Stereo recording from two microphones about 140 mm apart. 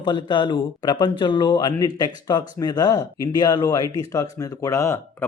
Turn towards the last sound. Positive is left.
turn(degrees=20)  # may be behind; listen again after turning